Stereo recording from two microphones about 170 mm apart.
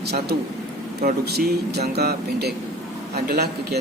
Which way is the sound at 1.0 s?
70° right (ahead or behind).